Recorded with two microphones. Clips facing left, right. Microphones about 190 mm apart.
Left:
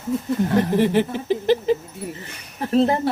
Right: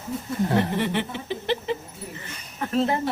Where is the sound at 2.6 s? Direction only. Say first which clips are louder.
Left 5 dB; 35° left (ahead or behind).